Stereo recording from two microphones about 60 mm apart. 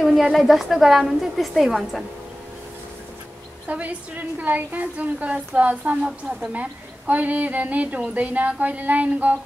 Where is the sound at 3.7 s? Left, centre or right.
Right.